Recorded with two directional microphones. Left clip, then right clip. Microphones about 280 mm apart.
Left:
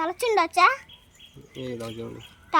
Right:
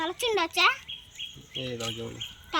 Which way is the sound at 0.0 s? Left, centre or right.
Centre.